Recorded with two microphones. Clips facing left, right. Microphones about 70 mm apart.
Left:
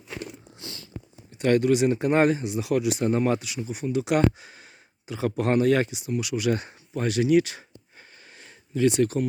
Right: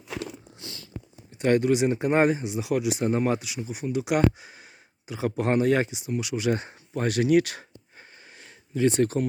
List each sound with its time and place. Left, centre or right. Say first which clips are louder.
0.6 s a sound: left 2 dB; left
1.4 s speech: left 1 dB; right
6.9 s speech: even; right
8.9 s speech: even; right